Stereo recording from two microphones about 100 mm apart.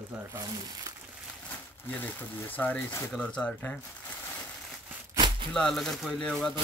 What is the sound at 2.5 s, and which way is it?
Speech, 15° left (ahead or behind).